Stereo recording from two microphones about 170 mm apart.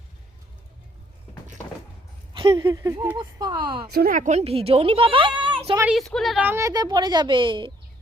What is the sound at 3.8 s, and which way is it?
Speech, 65° right (ahead or behind).